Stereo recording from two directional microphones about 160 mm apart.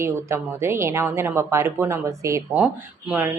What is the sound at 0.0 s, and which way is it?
A woman's voice, 15° right (ahead or behind).